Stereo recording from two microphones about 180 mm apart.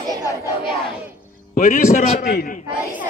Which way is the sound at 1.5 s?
50° left (ahead or behind).